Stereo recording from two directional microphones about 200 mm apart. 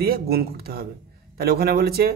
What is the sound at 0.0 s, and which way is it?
Speech, 50° right (ahead or behind).